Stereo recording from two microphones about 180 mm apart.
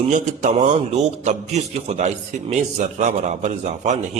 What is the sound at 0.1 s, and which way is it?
A man's voice, 40° right (ahead or behind).